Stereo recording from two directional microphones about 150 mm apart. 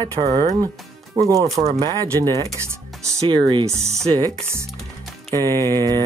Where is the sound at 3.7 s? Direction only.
20° right (ahead or behind).